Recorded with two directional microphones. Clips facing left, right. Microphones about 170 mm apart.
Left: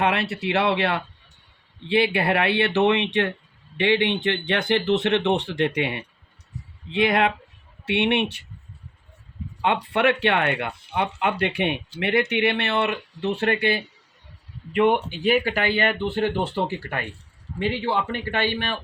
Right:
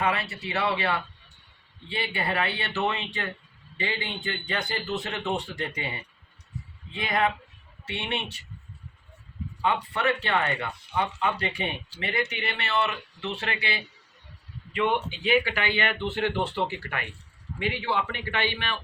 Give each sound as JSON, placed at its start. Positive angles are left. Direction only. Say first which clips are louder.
{"t": 0.0, "sound": "speech", "louder": "left 5 dB", "side_deg": 70}
{"t": 9.9, "sound": "a man's voice", "louder": "left 6 dB", "side_deg": 65}